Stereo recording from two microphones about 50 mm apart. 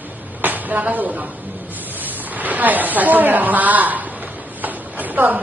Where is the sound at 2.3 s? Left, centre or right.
Right.